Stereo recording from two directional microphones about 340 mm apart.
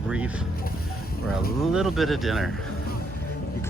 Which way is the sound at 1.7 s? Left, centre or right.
Centre.